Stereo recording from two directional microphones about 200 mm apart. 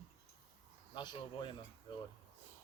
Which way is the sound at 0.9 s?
20° left (ahead or behind).